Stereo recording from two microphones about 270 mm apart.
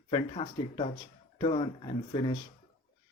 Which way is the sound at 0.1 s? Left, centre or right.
Left.